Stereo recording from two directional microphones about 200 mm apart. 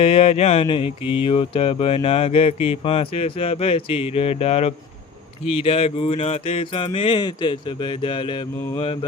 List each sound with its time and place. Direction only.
0.0 s speech: 30° left (ahead or behind)